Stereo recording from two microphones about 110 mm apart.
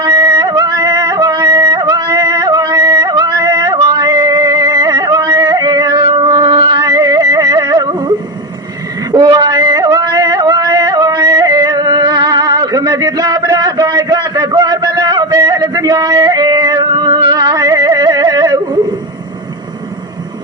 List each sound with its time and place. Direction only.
0.0 s music: 40° right (ahead or behind)
9.1 s music: 40° right (ahead or behind)